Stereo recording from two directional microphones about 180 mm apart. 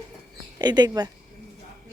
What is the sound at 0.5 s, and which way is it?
Speech, 25° right (ahead or behind).